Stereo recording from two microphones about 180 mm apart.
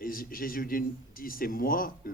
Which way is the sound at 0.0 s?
50° left (ahead or behind).